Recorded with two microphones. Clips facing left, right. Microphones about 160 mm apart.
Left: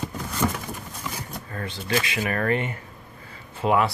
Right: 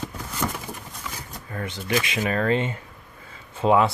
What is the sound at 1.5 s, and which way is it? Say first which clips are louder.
Speech: right 1 dB; 15° right (ahead or behind).